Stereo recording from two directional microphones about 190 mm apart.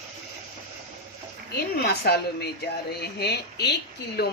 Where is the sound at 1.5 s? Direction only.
55° left (ahead or behind).